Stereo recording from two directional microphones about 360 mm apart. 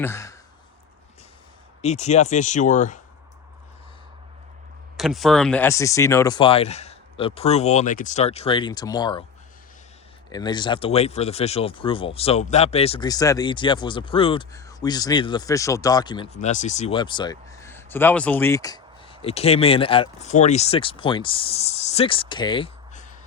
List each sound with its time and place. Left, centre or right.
0.0 s a sound: centre
1.8 s speech: centre
4.9 s speech: centre
10.3 s speech: centre